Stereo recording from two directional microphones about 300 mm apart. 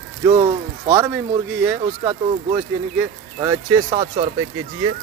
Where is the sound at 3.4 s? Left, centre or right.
Centre.